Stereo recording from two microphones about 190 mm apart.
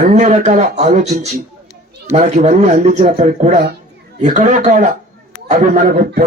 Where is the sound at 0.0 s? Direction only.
40° right (ahead or behind).